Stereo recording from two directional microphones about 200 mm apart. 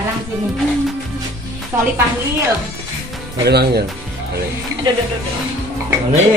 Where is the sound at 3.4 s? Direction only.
55° right (ahead or behind).